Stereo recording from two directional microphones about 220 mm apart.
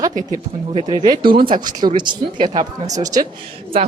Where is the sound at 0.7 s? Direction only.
25° right (ahead or behind).